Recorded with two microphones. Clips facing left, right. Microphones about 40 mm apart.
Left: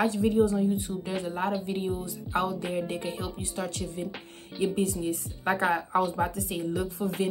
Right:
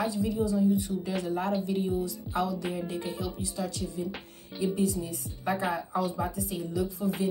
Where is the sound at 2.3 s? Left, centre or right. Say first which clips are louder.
Left 2 dB; left.